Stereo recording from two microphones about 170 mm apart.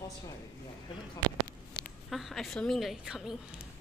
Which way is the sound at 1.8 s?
Centre (ahead or behind).